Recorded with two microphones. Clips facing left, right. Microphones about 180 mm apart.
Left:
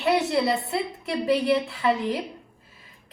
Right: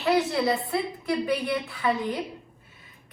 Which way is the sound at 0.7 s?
25° left (ahead or behind).